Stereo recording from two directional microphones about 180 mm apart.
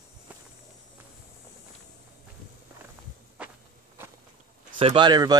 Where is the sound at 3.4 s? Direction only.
5° right (ahead or behind).